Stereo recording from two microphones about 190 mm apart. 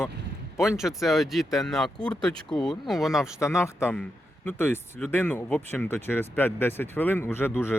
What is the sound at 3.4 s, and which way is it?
Speech, 15° left (ahead or behind).